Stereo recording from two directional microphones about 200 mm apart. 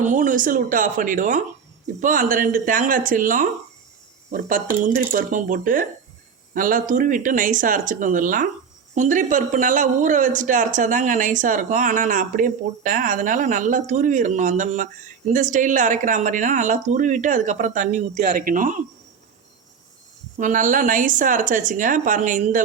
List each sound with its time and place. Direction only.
0.0 s speech: 40° right (ahead or behind)
20.4 s speech: 40° right (ahead or behind)